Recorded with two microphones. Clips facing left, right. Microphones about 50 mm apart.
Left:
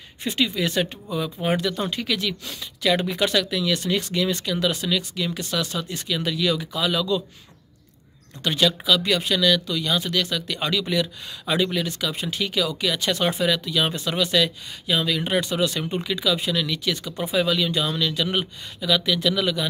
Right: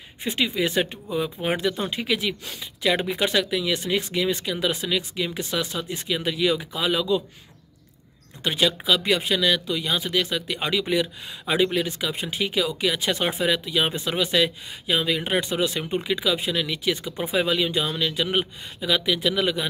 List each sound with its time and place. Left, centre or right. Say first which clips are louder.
0.2 s speech: even; centre
8.4 s speech: left 1 dB; centre